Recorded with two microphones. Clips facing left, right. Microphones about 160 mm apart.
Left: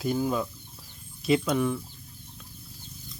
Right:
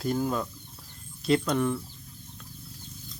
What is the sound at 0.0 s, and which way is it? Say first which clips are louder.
Speech: left 1 dB; 5° left (ahead or behind).